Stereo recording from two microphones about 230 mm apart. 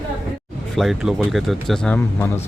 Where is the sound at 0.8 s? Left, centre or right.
Centre.